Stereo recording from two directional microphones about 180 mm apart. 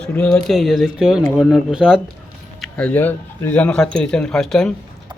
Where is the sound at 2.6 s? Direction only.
5° left (ahead or behind).